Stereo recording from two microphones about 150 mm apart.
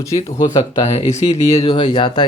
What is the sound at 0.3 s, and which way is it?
Speech, 25° left (ahead or behind).